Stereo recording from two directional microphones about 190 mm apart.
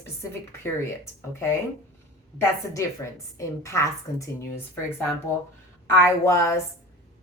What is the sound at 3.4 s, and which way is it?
A woman's voice, 15° left (ahead or behind).